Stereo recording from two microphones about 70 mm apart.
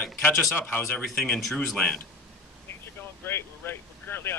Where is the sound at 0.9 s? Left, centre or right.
Centre.